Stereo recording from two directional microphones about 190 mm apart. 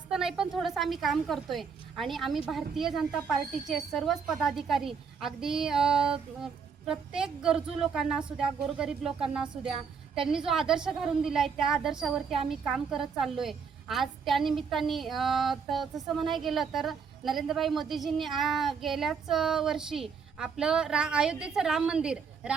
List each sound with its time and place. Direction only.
0.1 s a woman's voice: centre (ahead or behind)